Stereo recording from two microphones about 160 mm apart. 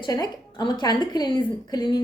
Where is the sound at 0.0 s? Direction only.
25° left (ahead or behind).